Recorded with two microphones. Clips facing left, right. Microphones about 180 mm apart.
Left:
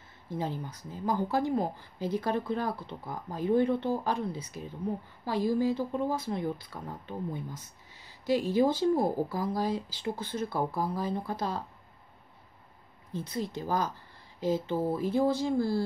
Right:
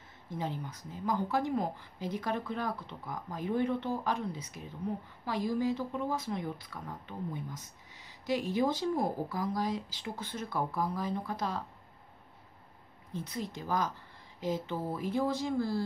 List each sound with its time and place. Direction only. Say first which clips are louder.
0.3 s speech: left 3 dB; 35° left (ahead or behind)
13.1 s speech: left 4 dB; 30° left (ahead or behind)